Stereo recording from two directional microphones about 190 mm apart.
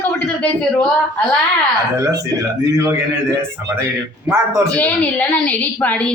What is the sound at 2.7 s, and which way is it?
Speech, 15° right (ahead or behind).